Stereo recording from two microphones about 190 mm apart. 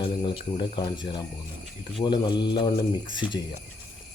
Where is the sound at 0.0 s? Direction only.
25° left (ahead or behind).